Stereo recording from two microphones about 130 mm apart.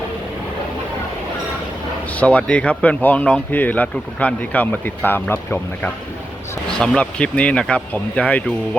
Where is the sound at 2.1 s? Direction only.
10° left (ahead or behind).